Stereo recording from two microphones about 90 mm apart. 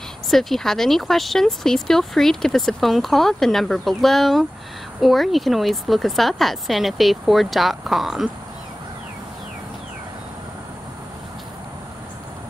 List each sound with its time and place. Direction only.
0.3 s speech: 5° left (ahead or behind)